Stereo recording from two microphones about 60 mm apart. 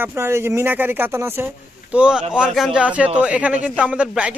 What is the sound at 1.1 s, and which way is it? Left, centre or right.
Speech, right.